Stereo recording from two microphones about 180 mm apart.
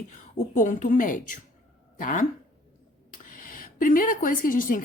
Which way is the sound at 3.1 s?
50° left (ahead or behind).